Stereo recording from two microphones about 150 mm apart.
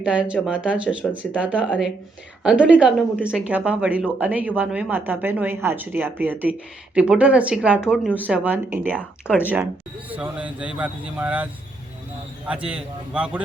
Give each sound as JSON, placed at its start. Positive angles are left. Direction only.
{"t": 0.0, "sound": "speech", "side_deg": -10}
{"t": 9.0, "sound": "speech", "side_deg": 10}
{"t": 10.1, "sound": "speech", "side_deg": -10}
{"t": 12.5, "sound": "speech", "side_deg": -5}